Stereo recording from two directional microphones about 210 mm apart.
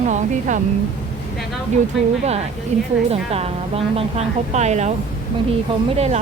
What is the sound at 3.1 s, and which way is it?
A woman's voice, 30° right (ahead or behind).